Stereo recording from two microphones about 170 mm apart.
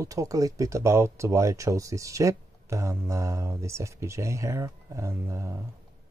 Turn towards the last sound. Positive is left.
turn(degrees=-15)  # may be behind; listen again after turning